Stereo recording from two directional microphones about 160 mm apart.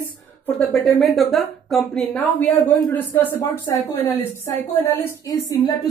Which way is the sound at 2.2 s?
10° left (ahead or behind).